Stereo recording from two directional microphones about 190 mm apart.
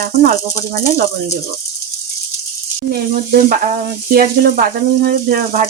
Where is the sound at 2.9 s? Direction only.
45° right (ahead or behind).